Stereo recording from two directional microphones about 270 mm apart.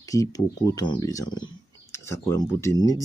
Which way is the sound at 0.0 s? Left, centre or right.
Centre.